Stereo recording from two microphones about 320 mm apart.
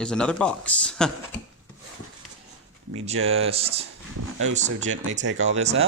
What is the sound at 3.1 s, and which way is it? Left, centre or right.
Speech, right.